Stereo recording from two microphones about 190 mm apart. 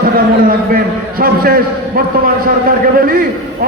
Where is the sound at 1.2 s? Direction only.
50° right (ahead or behind).